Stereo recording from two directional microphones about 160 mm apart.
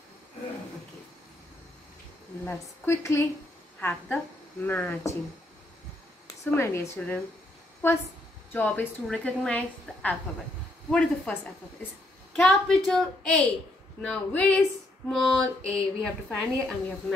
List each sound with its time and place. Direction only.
2.4 s a woman's voice: 15° left (ahead or behind)
6.4 s a woman's voice: 15° left (ahead or behind)
8.5 s a woman's voice: 10° left (ahead or behind)
12.4 s a woman's voice: 5° left (ahead or behind)